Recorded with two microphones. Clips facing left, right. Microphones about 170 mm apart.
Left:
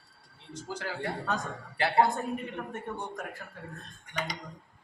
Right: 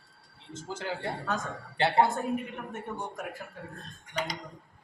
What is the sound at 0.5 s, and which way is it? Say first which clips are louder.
Speech: right 2 dB; 25° right (ahead or behind).